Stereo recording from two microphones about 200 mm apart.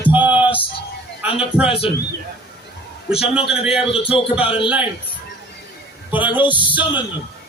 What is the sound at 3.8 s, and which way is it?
Speech, 30° left (ahead or behind).